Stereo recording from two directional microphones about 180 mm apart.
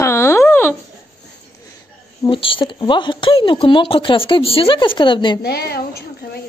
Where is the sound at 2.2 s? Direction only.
30° left (ahead or behind).